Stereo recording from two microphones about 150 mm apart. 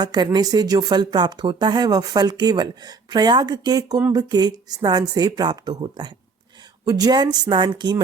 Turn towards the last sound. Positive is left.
turn(degrees=-30)  # may be behind; listen again after turning